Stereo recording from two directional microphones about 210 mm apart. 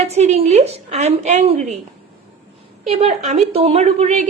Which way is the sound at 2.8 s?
30° right (ahead or behind).